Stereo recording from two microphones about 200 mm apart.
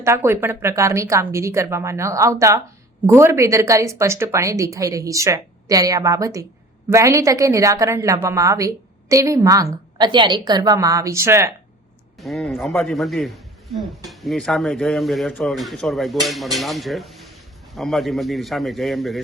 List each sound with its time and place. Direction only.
0.0 s a woman's voice: 15° right (ahead or behind)
12.2 s a man's voice: centre (ahead or behind)